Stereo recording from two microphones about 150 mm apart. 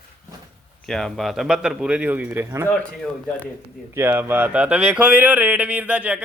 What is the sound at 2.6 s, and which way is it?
Speech, 10° left (ahead or behind).